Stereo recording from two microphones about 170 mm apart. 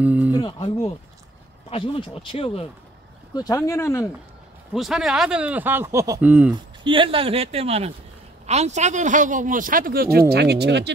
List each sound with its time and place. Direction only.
0.0 s speech: 10° right (ahead or behind)
0.3 s speech: 25° left (ahead or behind)
1.7 s speech: 35° left (ahead or behind)
3.3 s speech: 20° left (ahead or behind)
4.7 s speech: centre (ahead or behind)
6.8 s speech: 30° right (ahead or behind); by 10.2 s 60° right (ahead or behind)
10.3 s speech: 75° right (ahead or behind)